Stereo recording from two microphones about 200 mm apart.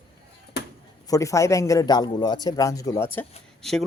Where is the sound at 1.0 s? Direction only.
15° left (ahead or behind).